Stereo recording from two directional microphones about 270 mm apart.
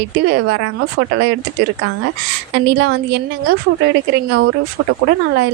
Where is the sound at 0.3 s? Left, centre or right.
Right.